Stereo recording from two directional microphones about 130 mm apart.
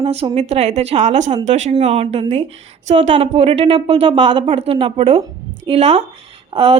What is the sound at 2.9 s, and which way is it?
A woman's voice, 60° right (ahead or behind).